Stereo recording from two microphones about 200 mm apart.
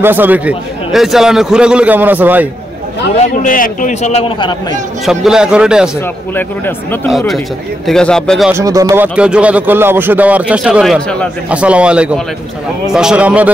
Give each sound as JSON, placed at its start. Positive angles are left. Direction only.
{"t": 0.0, "sound": "speech", "side_deg": -10}
{"t": 3.2, "sound": "a man's voice", "side_deg": 45}
{"t": 5.0, "sound": "a man's voice", "side_deg": 0}
{"t": 6.3, "sound": "speech", "side_deg": 10}
{"t": 7.1, "sound": "a man's voice", "side_deg": 0}
{"t": 8.5, "sound": "a man's voice", "side_deg": -15}